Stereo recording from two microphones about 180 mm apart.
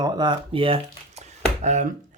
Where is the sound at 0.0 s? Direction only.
25° right (ahead or behind).